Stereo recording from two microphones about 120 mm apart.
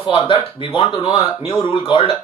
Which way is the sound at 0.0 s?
50° left (ahead or behind).